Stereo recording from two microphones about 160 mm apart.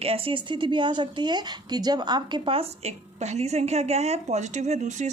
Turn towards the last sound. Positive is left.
turn(degrees=-50)  # may be behind; listen again after turning